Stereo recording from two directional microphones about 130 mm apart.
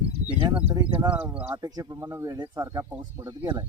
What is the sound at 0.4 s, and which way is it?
Speech, 35° right (ahead or behind).